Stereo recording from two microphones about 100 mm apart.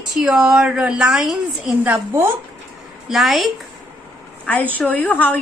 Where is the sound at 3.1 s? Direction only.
Centre (ahead or behind).